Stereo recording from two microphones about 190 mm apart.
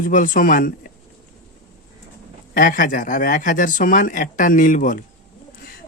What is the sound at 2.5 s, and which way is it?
Speech, 45° left (ahead or behind).